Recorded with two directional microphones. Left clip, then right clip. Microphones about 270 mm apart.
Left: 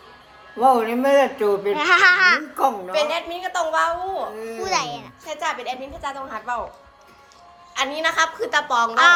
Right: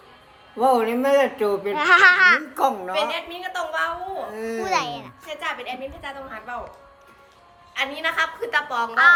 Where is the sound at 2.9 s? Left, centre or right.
Centre.